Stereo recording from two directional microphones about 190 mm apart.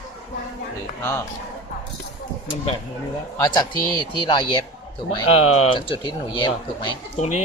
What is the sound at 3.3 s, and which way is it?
Speech, 20° left (ahead or behind).